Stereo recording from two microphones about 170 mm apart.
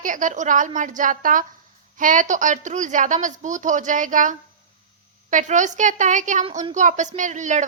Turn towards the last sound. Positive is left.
turn(degrees=-45)  # may be behind; listen again after turning